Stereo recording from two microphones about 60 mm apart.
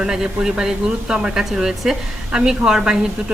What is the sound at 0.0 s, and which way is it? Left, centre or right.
Speech, centre.